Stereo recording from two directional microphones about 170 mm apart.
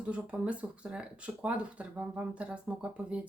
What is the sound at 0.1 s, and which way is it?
Speech, 5° right (ahead or behind).